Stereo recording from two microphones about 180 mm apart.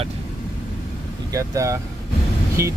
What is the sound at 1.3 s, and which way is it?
Speech, 20° right (ahead or behind).